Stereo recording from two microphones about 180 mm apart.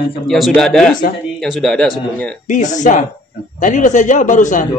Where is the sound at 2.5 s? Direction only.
45° left (ahead or behind).